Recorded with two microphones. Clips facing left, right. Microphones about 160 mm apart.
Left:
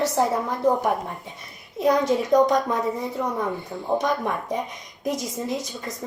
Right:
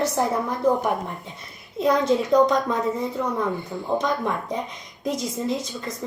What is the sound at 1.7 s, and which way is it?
A woman's voice, 15° left (ahead or behind).